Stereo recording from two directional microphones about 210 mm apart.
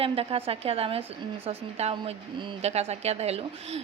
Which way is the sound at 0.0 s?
25° right (ahead or behind).